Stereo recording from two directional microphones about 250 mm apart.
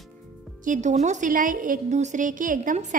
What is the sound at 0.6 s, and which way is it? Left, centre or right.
A woman's voice, right.